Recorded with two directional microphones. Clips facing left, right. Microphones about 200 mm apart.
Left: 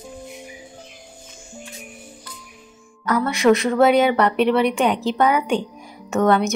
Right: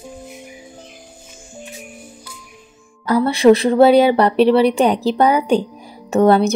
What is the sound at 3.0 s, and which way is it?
A woman's voice, 30° right (ahead or behind).